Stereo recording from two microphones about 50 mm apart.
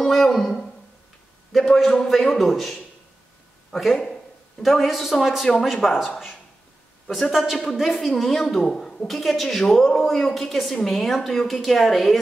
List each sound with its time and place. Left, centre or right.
0.0 s a sound: centre
1.5 s a woman's voice: centre
7.1 s a woman's voice: centre